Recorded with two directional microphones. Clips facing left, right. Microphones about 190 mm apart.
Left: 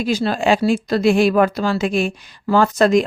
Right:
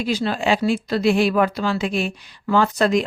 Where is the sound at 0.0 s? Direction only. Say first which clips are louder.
Left 3 dB; 45° left (ahead or behind).